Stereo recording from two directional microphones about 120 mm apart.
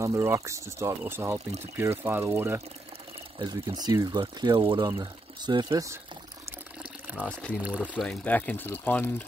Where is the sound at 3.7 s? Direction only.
30° right (ahead or behind).